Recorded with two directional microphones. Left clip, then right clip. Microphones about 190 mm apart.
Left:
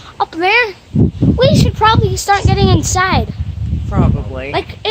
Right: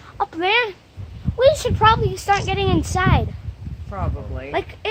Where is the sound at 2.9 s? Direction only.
5° right (ahead or behind).